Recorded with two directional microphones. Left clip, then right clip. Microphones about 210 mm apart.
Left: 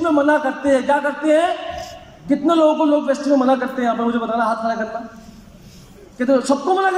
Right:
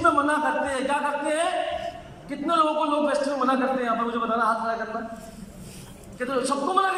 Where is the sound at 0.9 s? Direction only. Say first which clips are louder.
Left 7 dB; 35° left (ahead or behind).